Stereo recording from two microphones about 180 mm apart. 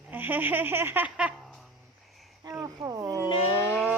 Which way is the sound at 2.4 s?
15° right (ahead or behind).